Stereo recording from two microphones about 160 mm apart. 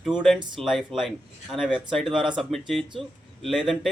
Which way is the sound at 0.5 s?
Centre (ahead or behind).